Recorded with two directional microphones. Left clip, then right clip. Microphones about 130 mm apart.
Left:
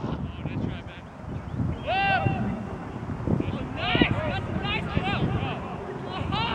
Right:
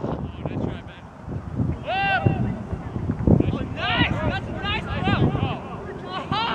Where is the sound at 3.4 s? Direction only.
30° right (ahead or behind).